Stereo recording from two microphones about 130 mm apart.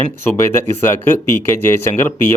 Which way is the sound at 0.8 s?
15° left (ahead or behind).